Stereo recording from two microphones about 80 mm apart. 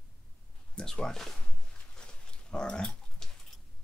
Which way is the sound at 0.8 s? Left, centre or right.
Centre.